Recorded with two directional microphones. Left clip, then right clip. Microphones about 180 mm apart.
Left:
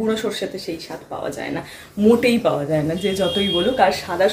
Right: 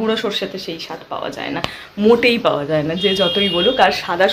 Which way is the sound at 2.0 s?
10° left (ahead or behind).